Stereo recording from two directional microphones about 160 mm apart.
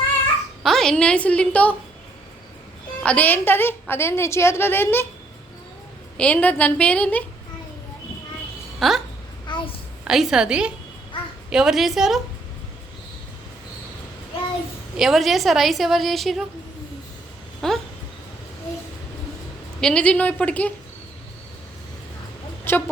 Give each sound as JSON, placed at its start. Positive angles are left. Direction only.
{"t": 0.6, "sound": "a woman's voice", "side_deg": 0}
{"t": 3.0, "sound": "a woman's voice", "side_deg": 10}
{"t": 6.1, "sound": "a woman's voice", "side_deg": 10}
{"t": 8.8, "sound": "a woman's voice", "side_deg": 0}
{"t": 9.5, "sound": "a sound", "side_deg": 30}
{"t": 10.0, "sound": "a woman's voice", "side_deg": -5}
{"t": 14.9, "sound": "a woman's voice", "side_deg": 0}
{"t": 17.6, "sound": "a woman's voice", "side_deg": 0}
{"t": 19.8, "sound": "a woman's voice", "side_deg": 5}
{"t": 22.7, "sound": "a sound", "side_deg": 10}